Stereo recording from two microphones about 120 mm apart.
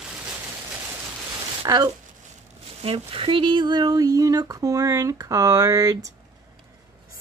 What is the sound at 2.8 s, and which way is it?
Speech, 55° right (ahead or behind).